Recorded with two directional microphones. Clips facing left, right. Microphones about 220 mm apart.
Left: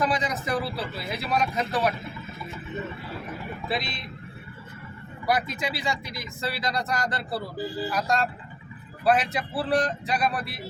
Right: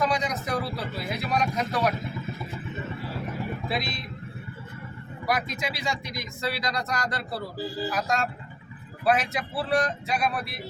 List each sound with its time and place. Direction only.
0.0 s speech: 5° left (ahead or behind)
5.2 s speech: centre (ahead or behind)